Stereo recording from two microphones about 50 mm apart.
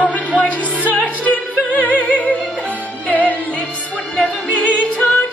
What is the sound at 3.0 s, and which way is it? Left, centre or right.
Music, left.